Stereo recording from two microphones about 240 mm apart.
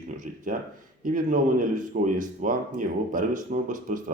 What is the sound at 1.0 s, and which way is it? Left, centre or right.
Speech, right.